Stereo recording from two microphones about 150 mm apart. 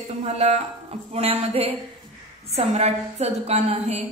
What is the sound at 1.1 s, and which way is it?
A woman's voice, 40° right (ahead or behind).